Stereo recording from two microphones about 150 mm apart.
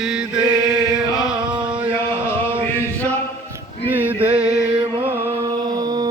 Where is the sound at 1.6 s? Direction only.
5° right (ahead or behind).